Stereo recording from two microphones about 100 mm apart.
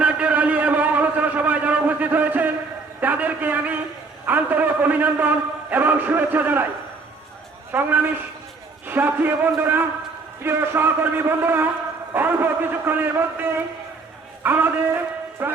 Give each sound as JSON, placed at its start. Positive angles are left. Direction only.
{"t": 0.0, "sound": "a sound", "side_deg": -10}
{"t": 4.3, "sound": "a man's voice", "side_deg": -20}
{"t": 7.7, "sound": "a man's voice", "side_deg": -20}